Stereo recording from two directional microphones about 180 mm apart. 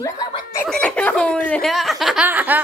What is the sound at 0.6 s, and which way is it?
Speech, 5° left (ahead or behind).